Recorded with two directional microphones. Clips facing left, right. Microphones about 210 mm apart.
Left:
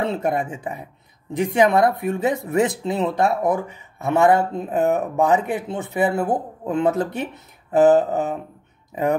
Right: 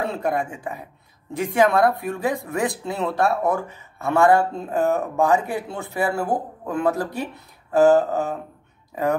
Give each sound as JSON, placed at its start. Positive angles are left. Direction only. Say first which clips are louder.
{"t": 0.0, "sound": "speech", "louder": "left 2 dB", "side_deg": 20}